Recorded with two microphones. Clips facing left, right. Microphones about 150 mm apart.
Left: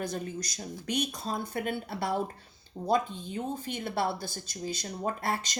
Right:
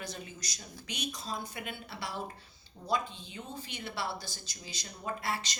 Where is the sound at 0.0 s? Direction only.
50° left (ahead or behind).